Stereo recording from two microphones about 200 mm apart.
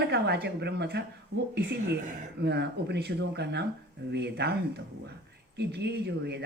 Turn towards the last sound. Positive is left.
turn(degrees=-55)  # may be behind; listen again after turning